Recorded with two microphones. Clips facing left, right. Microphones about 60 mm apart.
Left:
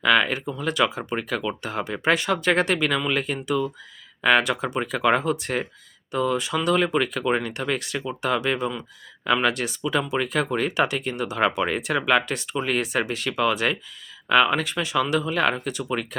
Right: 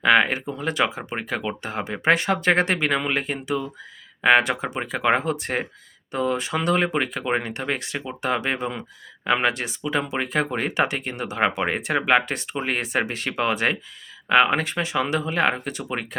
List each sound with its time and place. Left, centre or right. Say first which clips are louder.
0.0 s speech: right 2 dB; right